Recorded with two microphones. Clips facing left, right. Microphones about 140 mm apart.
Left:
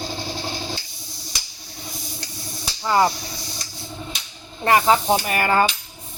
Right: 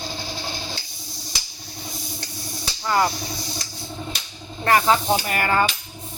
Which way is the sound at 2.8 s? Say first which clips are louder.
Left 3 dB; 20° left (ahead or behind).